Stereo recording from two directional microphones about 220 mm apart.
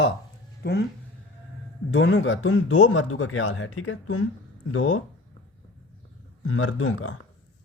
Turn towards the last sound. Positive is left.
turn(degrees=65)  # may be behind; listen again after turning